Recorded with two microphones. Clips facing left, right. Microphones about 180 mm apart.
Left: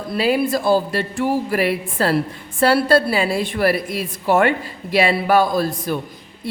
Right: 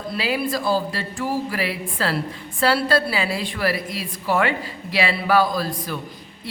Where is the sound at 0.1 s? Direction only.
50° left (ahead or behind).